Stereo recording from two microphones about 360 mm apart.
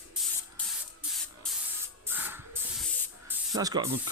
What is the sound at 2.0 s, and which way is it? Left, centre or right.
Spray, centre.